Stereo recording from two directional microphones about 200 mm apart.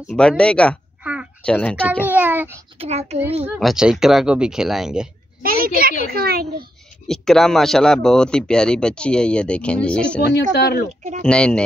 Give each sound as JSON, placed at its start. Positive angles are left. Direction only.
{"t": 0.1, "sound": "speech", "side_deg": 5}
{"t": 1.0, "sound": "a sound", "side_deg": -10}
{"t": 1.4, "sound": "speech", "side_deg": 5}
{"t": 2.0, "sound": "a child's voice", "side_deg": -10}
{"t": 2.8, "sound": "a child's voice", "side_deg": -30}
{"t": 3.5, "sound": "speech", "side_deg": 0}
{"t": 5.4, "sound": "a child's voice", "side_deg": -45}
{"t": 7.1, "sound": "speech", "side_deg": 0}
{"t": 10.2, "sound": "speech", "side_deg": 55}
{"t": 11.2, "sound": "speech", "side_deg": 5}